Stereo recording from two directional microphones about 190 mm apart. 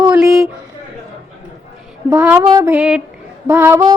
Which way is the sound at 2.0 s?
10° right (ahead or behind).